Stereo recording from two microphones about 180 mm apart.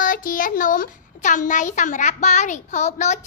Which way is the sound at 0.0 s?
50° left (ahead or behind).